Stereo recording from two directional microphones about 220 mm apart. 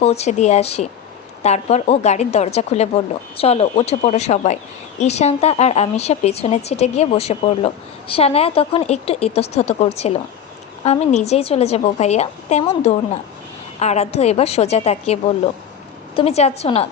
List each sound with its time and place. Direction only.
0.0 s a woman's voice: 30° left (ahead or behind)